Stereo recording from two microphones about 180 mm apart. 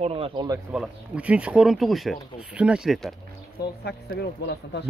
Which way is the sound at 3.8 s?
65° left (ahead or behind).